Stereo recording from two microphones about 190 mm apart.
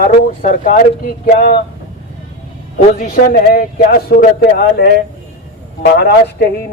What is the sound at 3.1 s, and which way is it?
Speech, 50° left (ahead or behind).